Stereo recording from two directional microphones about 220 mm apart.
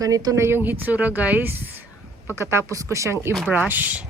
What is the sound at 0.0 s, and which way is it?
Speech, 15° right (ahead or behind).